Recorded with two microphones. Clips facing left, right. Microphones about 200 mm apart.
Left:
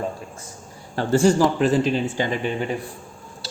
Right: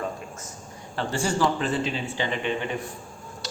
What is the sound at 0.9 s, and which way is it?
A man's voice, 40° left (ahead or behind).